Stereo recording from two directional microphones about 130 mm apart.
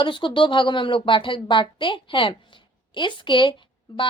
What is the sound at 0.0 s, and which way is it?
A woman's voice, 40° left (ahead or behind).